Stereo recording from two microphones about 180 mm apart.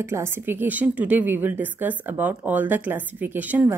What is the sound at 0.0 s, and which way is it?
A woman's voice, 15° right (ahead or behind).